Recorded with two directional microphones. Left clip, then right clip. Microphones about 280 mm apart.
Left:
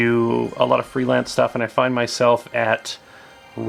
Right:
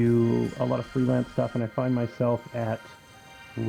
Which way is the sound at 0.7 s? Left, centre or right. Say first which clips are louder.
Left 8 dB; centre.